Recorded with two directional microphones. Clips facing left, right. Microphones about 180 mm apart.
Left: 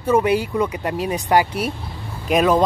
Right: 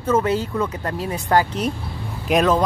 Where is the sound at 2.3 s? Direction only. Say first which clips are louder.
Even; centre (ahead or behind).